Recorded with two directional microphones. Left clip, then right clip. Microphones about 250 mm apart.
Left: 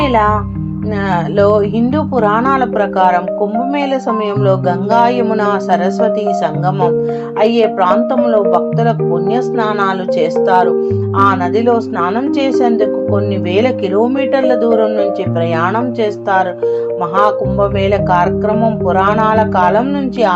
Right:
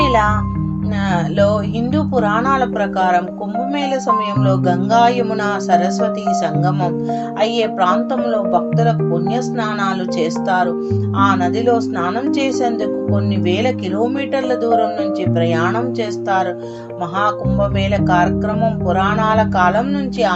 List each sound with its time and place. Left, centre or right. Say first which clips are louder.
0.0 s speech: left 2 dB; centre
1.1 s music: left 5 dB; centre
4.4 s music: left 4 dB; centre
17.2 s music: left 5 dB; centre